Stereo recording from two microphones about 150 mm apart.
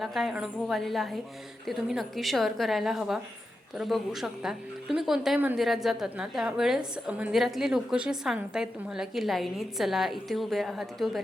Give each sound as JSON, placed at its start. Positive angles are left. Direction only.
{"t": 0.0, "sound": "a woman's voice", "side_deg": 0}